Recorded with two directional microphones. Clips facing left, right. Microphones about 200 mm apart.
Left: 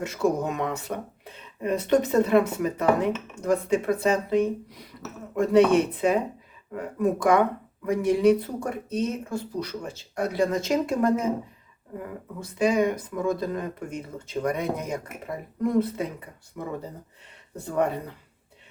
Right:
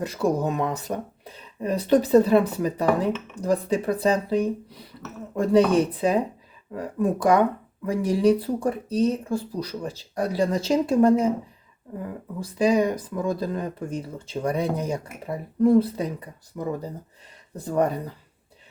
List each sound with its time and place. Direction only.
0.0 s speech: 35° right (ahead or behind)
12.4 s speech: 35° right (ahead or behind)
17.6 s speech: 35° right (ahead or behind)